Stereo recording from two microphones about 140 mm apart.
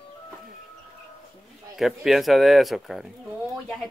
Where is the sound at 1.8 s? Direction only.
Centre (ahead or behind).